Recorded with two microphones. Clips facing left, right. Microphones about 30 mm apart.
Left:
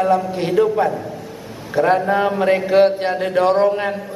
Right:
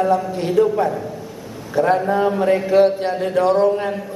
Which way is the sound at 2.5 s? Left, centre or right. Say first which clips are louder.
Left 1 dB; left.